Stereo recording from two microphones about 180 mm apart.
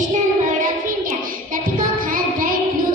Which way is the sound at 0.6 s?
50° right (ahead or behind).